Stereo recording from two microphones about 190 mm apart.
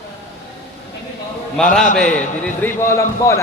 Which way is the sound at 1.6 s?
5° left (ahead or behind).